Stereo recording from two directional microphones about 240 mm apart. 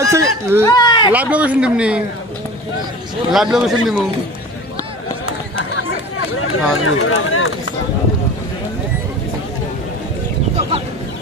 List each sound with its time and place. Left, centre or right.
0.0 s a sound: centre
0.6 s speech: centre
1.1 s speech: centre
3.3 s speech: centre
6.3 s speech: left